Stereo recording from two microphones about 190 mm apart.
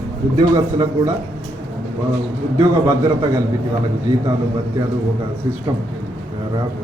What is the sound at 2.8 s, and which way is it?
Speech, 15° right (ahead or behind).